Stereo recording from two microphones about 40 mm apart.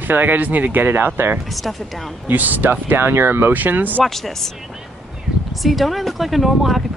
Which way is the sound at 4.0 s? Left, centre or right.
Centre.